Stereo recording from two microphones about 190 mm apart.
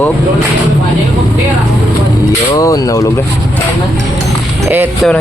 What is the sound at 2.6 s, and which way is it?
Speech, 20° left (ahead or behind).